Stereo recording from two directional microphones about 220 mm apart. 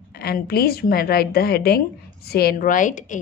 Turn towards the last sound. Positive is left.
turn(degrees=35)  # may be behind; listen again after turning